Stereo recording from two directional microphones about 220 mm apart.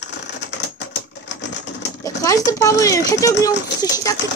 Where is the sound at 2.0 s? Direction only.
15° left (ahead or behind).